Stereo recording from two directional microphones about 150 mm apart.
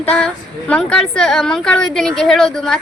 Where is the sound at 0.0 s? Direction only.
10° left (ahead or behind).